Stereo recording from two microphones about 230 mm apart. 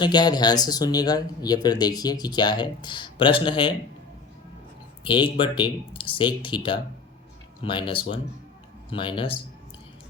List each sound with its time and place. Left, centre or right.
0.0 s speech: centre
5.0 s speech: left